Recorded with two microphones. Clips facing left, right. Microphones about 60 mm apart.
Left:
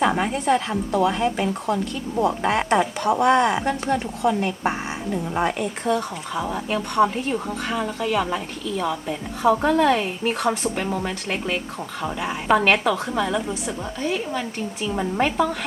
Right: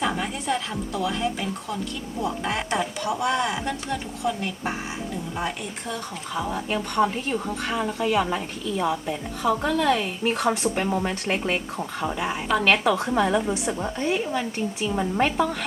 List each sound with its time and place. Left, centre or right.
0.0 s a woman's voice: left
6.3 s speech: centre
9.4 s a woman's voice: centre
12.5 s a woman's voice: centre
12.8 s a woman's voice: centre